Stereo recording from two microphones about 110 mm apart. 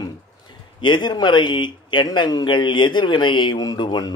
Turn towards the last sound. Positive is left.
turn(degrees=40)  # may be behind; listen again after turning